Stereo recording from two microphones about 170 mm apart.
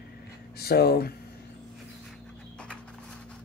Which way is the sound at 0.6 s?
65° left (ahead or behind).